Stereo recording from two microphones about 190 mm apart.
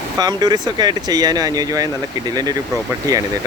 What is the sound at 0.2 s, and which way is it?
Speech, 20° right (ahead or behind).